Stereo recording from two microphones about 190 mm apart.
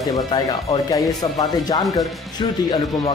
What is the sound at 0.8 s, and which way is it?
Speech, 20° left (ahead or behind).